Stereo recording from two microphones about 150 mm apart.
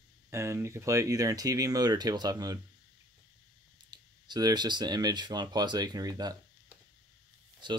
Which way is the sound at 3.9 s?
25° right (ahead or behind).